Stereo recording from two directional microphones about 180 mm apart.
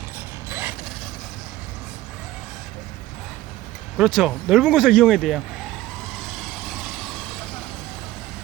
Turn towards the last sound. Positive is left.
turn(degrees=0)  # may be behind; listen again after turning